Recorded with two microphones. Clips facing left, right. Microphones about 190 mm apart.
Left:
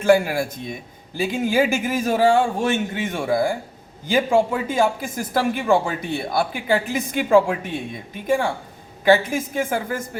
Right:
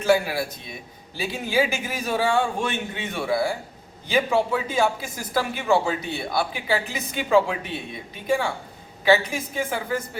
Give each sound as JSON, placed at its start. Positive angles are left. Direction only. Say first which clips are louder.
{"t": 0.0, "sound": "speech", "louder": "left 4 dB", "side_deg": 50}
{"t": 9.0, "sound": "speech", "louder": "left 3 dB", "side_deg": 50}